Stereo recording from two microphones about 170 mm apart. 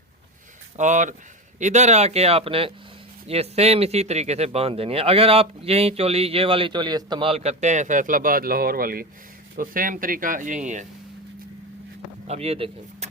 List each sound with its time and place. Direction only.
0.8 s speech: 45° right (ahead or behind)
12.3 s speech: 35° right (ahead or behind)